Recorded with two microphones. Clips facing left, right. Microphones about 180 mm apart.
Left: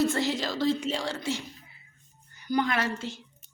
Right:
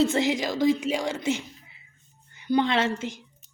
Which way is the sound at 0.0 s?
20° right (ahead or behind).